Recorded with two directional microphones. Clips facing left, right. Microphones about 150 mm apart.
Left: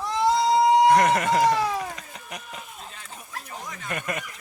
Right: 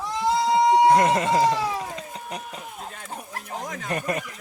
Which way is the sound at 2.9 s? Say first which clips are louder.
Right 5 dB; 50° right (ahead or behind).